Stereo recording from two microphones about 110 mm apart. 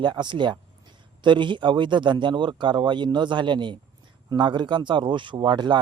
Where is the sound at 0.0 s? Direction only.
45° right (ahead or behind).